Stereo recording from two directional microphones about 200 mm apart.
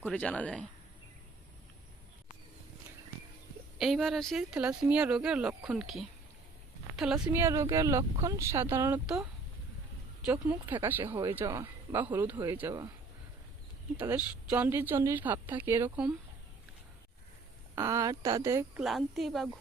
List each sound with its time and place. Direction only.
0.0 s speech: 5° left (ahead or behind)
3.8 s speech: centre (ahead or behind)
10.2 s speech: 5° right (ahead or behind)
13.9 s speech: 5° right (ahead or behind)
17.7 s speech: 15° right (ahead or behind)
18.8 s speech: centre (ahead or behind)